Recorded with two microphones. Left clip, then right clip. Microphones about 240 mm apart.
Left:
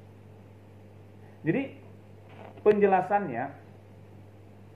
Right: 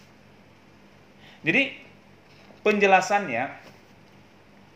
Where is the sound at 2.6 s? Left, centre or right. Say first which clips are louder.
Right 3 dB; right.